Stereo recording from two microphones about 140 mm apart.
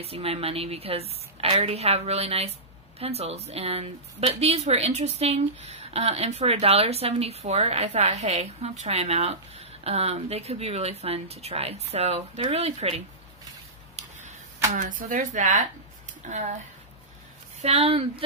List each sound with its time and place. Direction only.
0.0 s a woman's voice: 45° right (ahead or behind)
14.7 s speech: 75° right (ahead or behind)
17.6 s a woman's voice: 45° right (ahead or behind)